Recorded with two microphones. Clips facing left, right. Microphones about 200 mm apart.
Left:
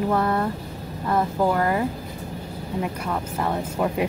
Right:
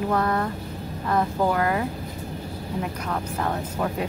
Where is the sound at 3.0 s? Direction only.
10° left (ahead or behind).